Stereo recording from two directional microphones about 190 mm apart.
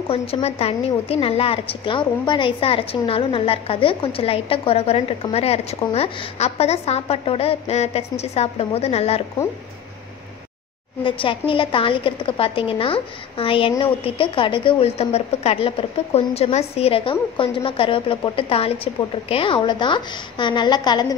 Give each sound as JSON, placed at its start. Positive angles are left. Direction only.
{"t": 0.1, "sound": "a woman's voice", "side_deg": 30}
{"t": 11.1, "sound": "a woman's voice", "side_deg": 25}